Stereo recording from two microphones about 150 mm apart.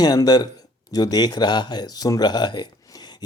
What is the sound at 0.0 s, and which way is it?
Speech, 25° left (ahead or behind).